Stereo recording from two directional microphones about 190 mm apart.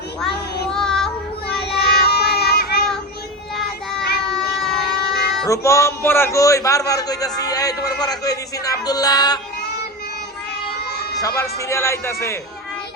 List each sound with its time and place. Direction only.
0.7 s child singing: 5° left (ahead or behind)
1.6 s child singing: 60° left (ahead or behind)
4.4 s a sound: centre (ahead or behind)
5.5 s a man's voice: 15° left (ahead or behind)
11.2 s speech: 15° left (ahead or behind)